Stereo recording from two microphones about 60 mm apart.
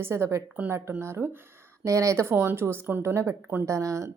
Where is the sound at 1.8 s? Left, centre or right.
Right.